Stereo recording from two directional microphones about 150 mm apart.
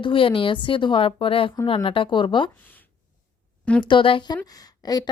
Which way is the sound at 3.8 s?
35° left (ahead or behind).